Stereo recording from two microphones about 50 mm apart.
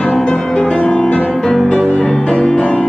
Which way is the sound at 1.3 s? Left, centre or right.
Centre.